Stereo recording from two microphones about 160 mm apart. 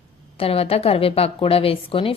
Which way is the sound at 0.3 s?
35° left (ahead or behind).